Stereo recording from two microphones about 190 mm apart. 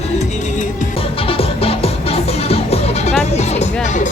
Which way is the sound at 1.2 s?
30° left (ahead or behind).